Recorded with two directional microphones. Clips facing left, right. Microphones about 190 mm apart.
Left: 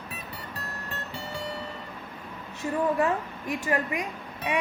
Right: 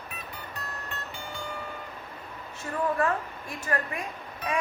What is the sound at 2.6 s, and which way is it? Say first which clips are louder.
A woman's voice: left 2 dB; 20° left (ahead or behind).